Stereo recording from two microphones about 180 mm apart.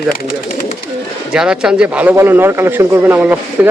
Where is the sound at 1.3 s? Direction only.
5° right (ahead or behind).